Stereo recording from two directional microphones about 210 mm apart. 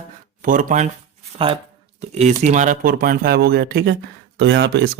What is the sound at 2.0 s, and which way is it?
Speech, 30° right (ahead or behind).